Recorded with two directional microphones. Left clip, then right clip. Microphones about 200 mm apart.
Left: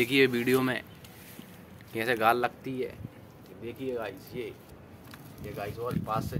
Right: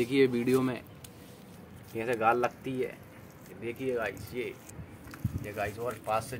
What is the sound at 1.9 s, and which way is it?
Speech, 5° left (ahead or behind).